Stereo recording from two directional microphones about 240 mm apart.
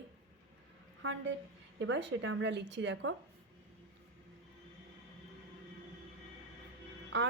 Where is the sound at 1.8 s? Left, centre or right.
Right.